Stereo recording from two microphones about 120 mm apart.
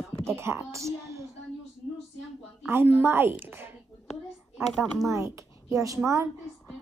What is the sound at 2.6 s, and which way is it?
A woman's voice, 20° right (ahead or behind).